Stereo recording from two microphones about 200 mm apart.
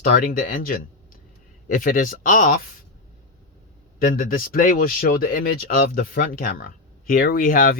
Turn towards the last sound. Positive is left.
turn(degrees=45)  # may be behind; listen again after turning